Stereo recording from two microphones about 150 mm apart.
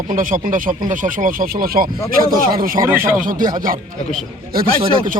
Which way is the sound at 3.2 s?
65° right (ahead or behind).